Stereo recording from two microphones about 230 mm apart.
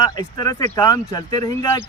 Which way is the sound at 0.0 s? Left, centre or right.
Centre.